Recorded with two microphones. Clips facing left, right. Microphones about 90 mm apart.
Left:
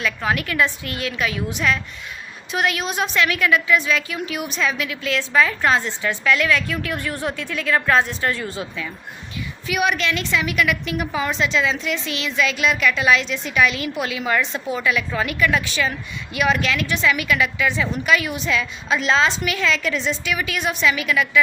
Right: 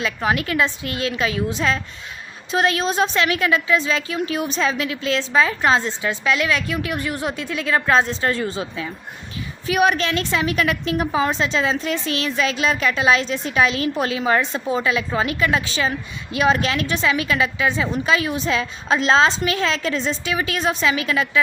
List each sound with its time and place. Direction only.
0.0 s a woman's voice: 25° right (ahead or behind)
9.6 s a woman's voice: 35° right (ahead or behind)